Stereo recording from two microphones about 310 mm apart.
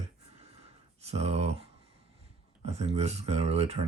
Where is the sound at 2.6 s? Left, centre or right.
Right.